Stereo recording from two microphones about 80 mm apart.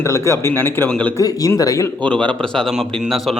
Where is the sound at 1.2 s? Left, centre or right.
Left.